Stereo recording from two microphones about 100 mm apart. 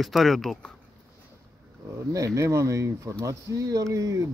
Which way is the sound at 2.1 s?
30° right (ahead or behind).